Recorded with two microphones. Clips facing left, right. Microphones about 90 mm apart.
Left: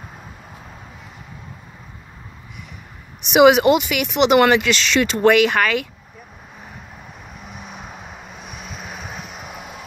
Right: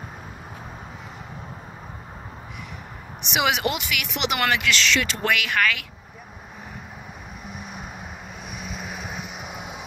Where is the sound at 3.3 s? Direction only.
20° left (ahead or behind).